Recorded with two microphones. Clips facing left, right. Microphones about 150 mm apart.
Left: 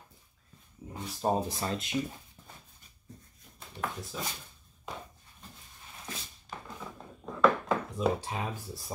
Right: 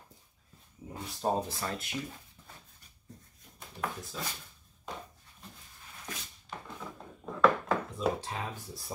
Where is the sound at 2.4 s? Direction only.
25° left (ahead or behind).